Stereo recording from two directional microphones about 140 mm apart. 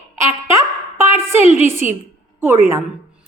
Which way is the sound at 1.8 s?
45° left (ahead or behind).